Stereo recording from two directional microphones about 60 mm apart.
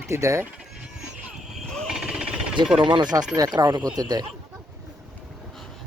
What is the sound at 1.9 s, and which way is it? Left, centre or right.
Jackhammer, centre.